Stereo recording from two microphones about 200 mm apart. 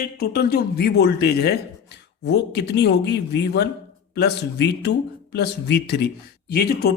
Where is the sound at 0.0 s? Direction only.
50° left (ahead or behind).